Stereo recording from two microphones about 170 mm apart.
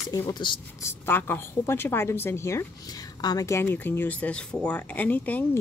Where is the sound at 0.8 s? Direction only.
15° left (ahead or behind).